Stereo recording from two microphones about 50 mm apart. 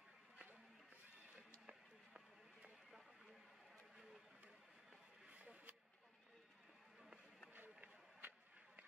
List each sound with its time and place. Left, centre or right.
1.7 s run: right
5.3 s a sound: right
7.5 s run: right